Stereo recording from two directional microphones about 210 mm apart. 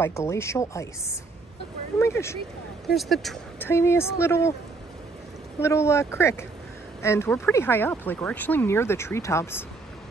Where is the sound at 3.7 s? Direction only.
10° left (ahead or behind).